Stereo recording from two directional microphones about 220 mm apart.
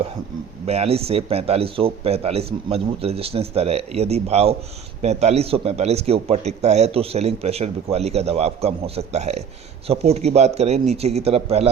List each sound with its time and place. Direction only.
0.6 s a man's voice: 25° right (ahead or behind)